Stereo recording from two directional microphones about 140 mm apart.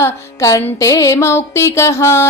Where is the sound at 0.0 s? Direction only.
20° left (ahead or behind).